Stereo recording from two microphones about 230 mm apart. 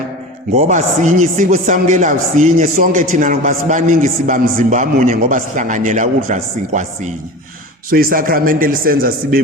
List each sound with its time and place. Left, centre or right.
0.5 s a man's voice: right